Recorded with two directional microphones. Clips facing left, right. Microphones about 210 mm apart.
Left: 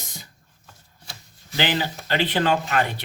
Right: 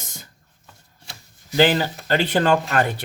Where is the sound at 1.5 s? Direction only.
45° right (ahead or behind).